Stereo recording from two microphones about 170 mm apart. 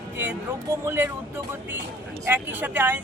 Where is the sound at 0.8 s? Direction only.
15° right (ahead or behind).